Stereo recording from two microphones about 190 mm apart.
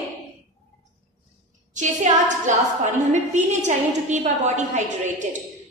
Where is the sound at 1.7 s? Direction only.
40° right (ahead or behind).